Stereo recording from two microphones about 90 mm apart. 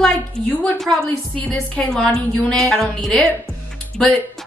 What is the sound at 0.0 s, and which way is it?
A woman's voice, 5° left (ahead or behind).